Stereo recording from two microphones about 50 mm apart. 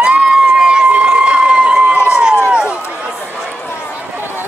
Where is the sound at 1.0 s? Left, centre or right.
Right.